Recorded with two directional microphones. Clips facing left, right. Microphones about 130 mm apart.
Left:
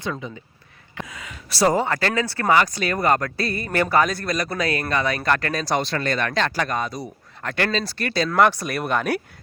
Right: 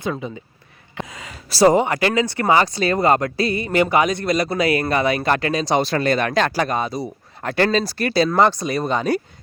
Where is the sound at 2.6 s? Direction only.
30° right (ahead or behind).